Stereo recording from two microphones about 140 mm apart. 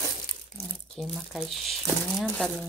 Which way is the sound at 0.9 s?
Centre (ahead or behind).